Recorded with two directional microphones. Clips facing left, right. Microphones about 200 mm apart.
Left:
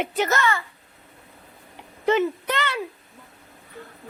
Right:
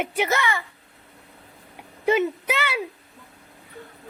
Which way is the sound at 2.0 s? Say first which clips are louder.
Even; 10° right (ahead or behind).